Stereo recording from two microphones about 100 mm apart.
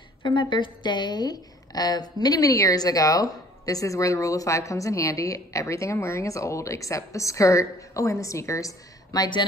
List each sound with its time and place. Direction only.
0.2 s a woman's voice: 55° left (ahead or behind)